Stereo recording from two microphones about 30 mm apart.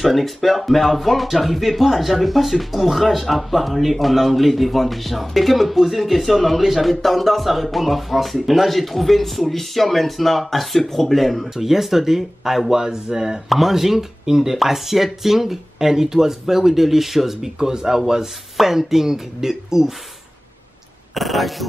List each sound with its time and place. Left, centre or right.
0.0 s speech: centre
11.5 s speech: centre
12.7 s speech: centre
13.5 s speech: centre
21.1 s speech: centre